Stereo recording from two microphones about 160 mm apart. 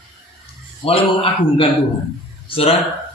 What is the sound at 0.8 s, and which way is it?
A man's voice, 35° left (ahead or behind).